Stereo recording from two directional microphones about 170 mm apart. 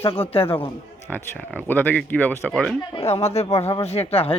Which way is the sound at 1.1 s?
10° left (ahead or behind).